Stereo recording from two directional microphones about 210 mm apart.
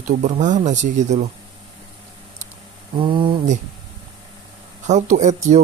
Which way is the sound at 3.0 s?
25° right (ahead or behind).